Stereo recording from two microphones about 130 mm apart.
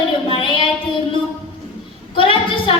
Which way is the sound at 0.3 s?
40° left (ahead or behind).